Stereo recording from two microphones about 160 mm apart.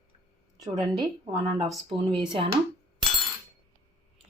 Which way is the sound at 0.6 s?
25° right (ahead or behind).